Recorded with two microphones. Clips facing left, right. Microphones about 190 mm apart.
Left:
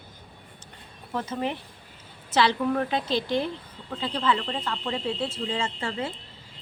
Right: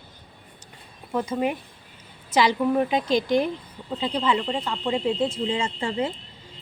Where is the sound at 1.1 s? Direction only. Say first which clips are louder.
Right 5 dB; 10° right (ahead or behind).